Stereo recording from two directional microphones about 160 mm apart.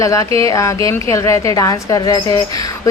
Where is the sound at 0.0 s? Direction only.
20° left (ahead or behind).